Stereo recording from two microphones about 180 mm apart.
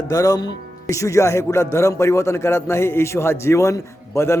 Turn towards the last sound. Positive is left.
turn(degrees=15)  # may be behind; listen again after turning